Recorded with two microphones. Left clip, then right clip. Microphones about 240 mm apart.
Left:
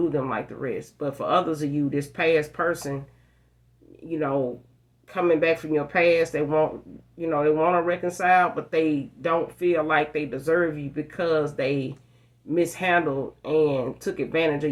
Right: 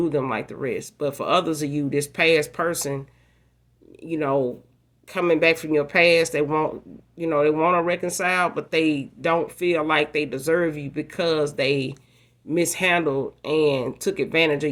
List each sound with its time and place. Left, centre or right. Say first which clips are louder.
0.0 s speech: right 2 dB; right
4.1 s speech: right 3 dB; right